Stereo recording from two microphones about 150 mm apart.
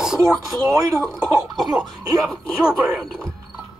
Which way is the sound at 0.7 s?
25° right (ahead or behind).